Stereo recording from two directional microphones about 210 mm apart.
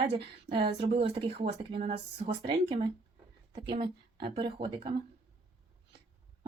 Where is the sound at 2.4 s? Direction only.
20° right (ahead or behind).